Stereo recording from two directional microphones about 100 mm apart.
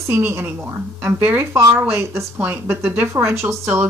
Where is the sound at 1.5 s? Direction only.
30° right (ahead or behind).